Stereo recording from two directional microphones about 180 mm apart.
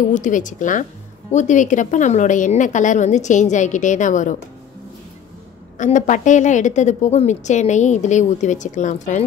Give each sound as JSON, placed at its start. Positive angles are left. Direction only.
{"t": 0.1, "sound": "a woman's voice", "side_deg": 45}
{"t": 5.8, "sound": "a woman's voice", "side_deg": 45}